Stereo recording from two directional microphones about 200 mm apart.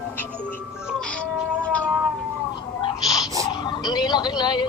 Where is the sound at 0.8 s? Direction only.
5° left (ahead or behind).